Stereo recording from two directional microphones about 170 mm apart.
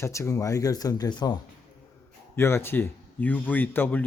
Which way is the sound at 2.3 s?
15° left (ahead or behind).